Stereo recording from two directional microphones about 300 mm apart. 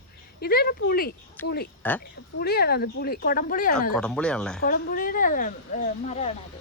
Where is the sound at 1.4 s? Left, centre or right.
Centre.